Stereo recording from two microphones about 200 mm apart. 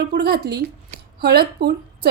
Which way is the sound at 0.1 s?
55° right (ahead or behind).